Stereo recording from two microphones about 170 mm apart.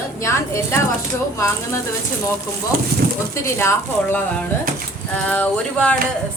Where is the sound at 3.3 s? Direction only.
15° left (ahead or behind).